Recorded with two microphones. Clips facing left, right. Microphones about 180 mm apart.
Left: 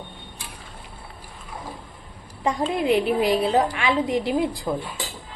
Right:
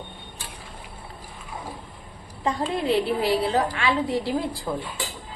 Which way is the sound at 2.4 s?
15° left (ahead or behind).